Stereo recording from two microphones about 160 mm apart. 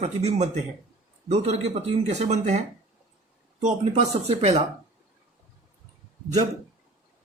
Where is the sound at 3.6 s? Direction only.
45° right (ahead or behind).